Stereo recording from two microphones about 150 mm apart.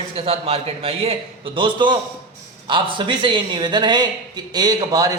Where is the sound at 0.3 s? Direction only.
40° right (ahead or behind).